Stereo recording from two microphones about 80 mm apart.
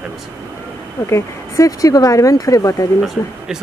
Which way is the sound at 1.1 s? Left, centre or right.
Left.